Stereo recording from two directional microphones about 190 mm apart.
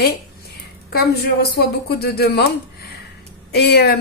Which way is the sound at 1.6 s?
55° left (ahead or behind).